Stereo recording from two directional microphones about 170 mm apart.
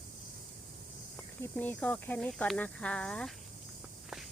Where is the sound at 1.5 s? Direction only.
10° left (ahead or behind).